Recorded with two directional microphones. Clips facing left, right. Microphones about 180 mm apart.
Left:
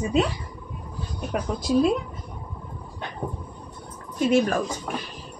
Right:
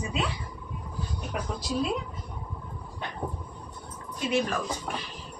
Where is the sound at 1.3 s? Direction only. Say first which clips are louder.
Left 7 dB; 50° left (ahead or behind).